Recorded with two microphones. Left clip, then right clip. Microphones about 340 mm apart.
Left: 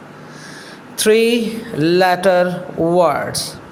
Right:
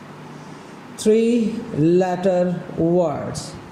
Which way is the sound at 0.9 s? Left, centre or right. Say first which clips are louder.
Left 4 dB; left.